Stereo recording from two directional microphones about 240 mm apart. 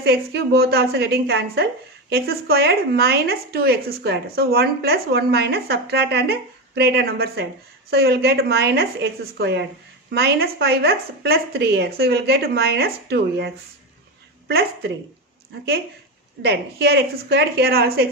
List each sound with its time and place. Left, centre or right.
0.0 s a woman's voice: right
16.4 s a woman's voice: right